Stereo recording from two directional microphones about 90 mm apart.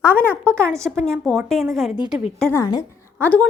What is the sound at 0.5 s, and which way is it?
Speech, 30° right (ahead or behind).